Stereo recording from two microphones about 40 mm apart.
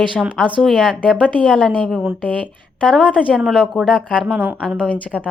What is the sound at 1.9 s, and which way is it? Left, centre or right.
Speech, centre.